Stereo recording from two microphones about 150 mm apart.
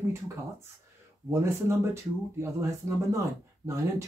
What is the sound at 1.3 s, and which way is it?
Speech, 20° right (ahead or behind).